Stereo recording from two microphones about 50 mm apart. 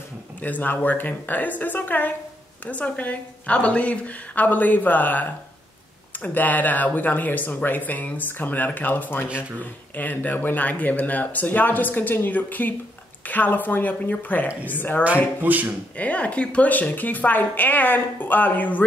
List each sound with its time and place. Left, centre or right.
0.4 s speech: left
15.4 s speech: right
16.0 s speech: left